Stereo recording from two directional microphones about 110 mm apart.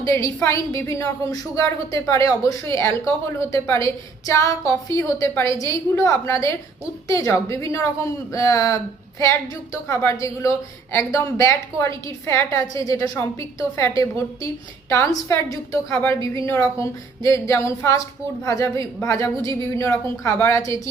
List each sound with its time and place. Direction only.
0.0 s a woman's voice: 25° left (ahead or behind)